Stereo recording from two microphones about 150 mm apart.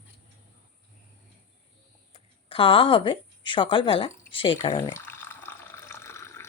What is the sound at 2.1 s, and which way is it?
Speech, 35° left (ahead or behind).